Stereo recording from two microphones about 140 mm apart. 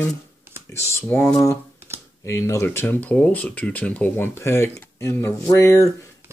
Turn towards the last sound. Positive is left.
turn(degrees=20)  # may be behind; listen again after turning